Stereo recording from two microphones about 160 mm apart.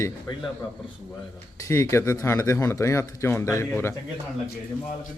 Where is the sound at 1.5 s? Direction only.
20° left (ahead or behind).